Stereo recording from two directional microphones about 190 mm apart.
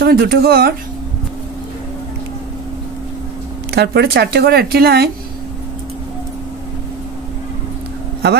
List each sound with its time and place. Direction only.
0.0 s a woman's voice: 55° right (ahead or behind)
3.7 s a woman's voice: 60° right (ahead or behind)